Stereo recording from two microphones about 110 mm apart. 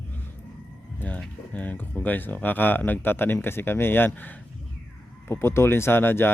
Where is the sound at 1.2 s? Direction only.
15° left (ahead or behind).